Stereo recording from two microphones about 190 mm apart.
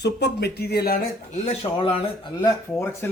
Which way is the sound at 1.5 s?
30° left (ahead or behind).